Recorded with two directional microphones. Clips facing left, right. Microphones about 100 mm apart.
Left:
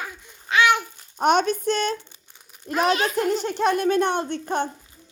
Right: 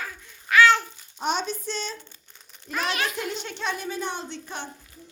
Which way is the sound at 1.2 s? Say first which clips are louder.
Left 8 dB; 60° left (ahead or behind).